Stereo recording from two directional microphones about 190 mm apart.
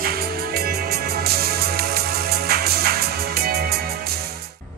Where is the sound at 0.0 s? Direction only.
50° right (ahead or behind).